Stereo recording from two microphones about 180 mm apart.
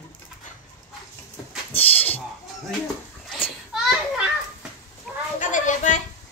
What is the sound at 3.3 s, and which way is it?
Children playing, centre (ahead or behind).